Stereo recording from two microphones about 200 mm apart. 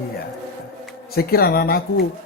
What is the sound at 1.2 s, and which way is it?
Speech, 50° left (ahead or behind).